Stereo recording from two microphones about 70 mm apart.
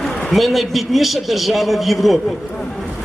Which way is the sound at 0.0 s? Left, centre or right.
Centre.